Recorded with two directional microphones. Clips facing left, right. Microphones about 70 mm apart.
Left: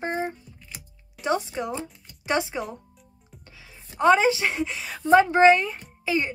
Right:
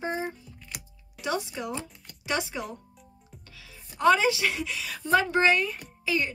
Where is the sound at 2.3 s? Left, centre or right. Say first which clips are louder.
Left 4 dB; left.